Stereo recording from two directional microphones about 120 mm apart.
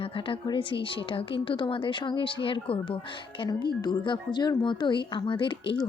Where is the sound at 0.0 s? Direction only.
50° left (ahead or behind).